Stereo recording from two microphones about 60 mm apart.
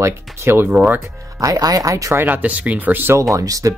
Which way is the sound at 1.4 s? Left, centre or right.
Right.